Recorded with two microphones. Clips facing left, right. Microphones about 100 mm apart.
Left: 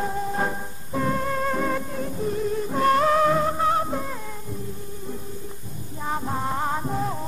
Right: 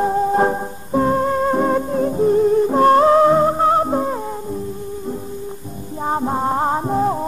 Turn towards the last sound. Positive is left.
turn(degrees=-35)  # may be behind; listen again after turning